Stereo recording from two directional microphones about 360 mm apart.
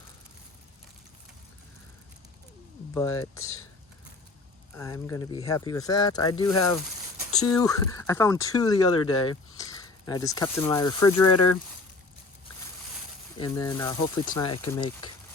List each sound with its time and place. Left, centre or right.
2.9 s speech: centre
4.8 s speech: centre
11.0 s speech: left
13.4 s speech: centre